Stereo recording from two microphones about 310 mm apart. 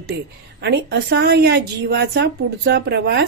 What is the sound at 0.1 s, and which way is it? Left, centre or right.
A woman's voice, right.